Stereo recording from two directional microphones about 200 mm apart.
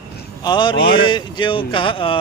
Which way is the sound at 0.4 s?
20° left (ahead or behind).